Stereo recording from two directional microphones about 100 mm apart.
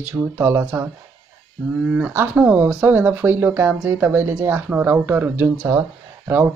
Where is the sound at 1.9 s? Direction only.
15° right (ahead or behind).